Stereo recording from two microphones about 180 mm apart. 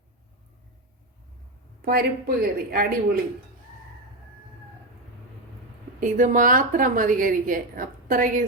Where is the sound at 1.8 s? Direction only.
55° right (ahead or behind).